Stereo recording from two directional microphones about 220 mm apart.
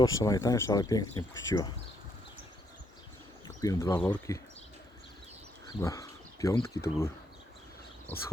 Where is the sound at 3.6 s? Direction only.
15° left (ahead or behind).